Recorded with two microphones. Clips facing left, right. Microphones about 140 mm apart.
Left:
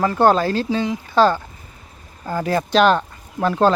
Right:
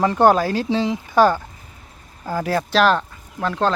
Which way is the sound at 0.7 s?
25° right (ahead or behind).